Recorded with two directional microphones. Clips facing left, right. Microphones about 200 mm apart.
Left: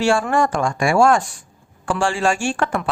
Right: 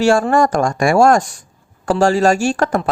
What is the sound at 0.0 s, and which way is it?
Speech, 40° right (ahead or behind).